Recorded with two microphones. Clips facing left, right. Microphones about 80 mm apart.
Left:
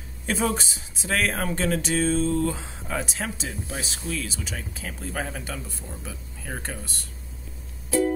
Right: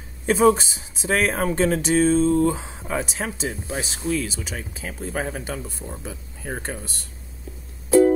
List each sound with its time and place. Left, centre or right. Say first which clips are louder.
0.3 s speech: right 9 dB; centre